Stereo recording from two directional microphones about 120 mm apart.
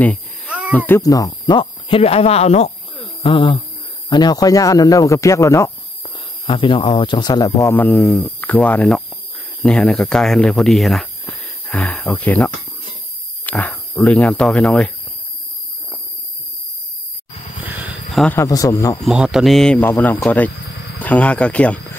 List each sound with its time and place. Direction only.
0.7 s speech: 15° left (ahead or behind)
1.0 s speech: 30° left (ahead or behind); by 2.7 s 65° left (ahead or behind)
3.2 s speech: 45° left (ahead or behind); by 5.7 s 25° left (ahead or behind)
6.4 s speech: 45° left (ahead or behind); by 7.7 s 30° left (ahead or behind)
7.7 s speech: 15° left (ahead or behind)
9.6 s speech: 5° left (ahead or behind)
13.5 s speech: 10° left (ahead or behind)
17.6 s a sound: 15° right (ahead or behind)
18.3 s speech: 25° left (ahead or behind)
19.0 s speech: 5° right (ahead or behind); by 21.7 s 10° left (ahead or behind)